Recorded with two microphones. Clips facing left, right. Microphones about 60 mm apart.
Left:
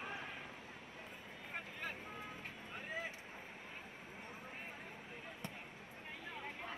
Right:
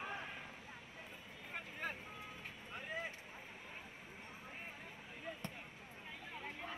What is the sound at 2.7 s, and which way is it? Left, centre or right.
Vehicle, centre.